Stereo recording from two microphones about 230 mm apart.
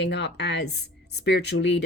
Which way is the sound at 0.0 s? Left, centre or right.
Left.